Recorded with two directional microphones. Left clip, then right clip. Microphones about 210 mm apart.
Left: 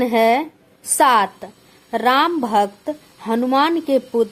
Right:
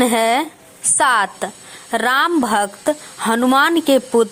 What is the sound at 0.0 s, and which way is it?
A woman's voice, 10° right (ahead or behind).